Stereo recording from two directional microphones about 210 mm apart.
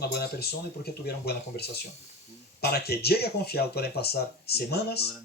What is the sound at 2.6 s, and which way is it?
Speech, 50° left (ahead or behind).